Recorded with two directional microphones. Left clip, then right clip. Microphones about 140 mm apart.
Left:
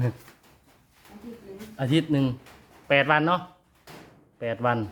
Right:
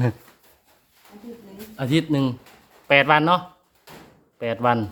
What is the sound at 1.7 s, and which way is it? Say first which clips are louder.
Speech: right 2 dB; 15° right (ahead or behind).